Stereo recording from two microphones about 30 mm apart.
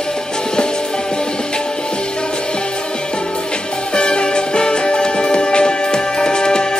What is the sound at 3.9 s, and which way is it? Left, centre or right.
Music, left.